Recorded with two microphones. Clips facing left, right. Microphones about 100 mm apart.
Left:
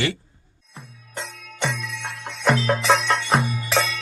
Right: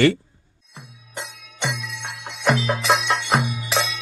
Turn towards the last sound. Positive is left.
turn(degrees=-5)  # may be behind; listen again after turning